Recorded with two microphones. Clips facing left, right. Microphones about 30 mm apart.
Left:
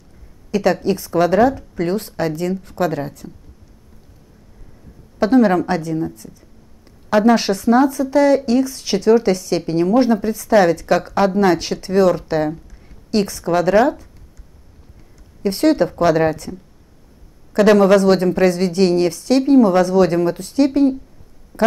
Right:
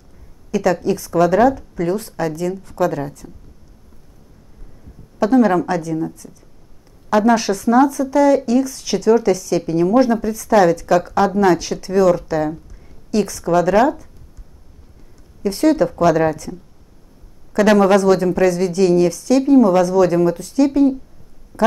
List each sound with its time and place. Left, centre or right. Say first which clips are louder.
0.5 s a woman's voice: even; left
5.2 s a woman's voice: even; left
7.2 s a woman's voice: left 1 dB; left
8.5 s a woman's voice: even; left
12.4 s a sound: even; centre
13.1 s a woman's voice: right 1 dB; left
15.4 s a woman's voice: even; left
17.5 s a woman's voice: left 1 dB; left